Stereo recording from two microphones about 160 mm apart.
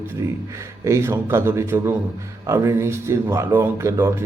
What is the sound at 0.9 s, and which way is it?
Speech, 20° right (ahead or behind).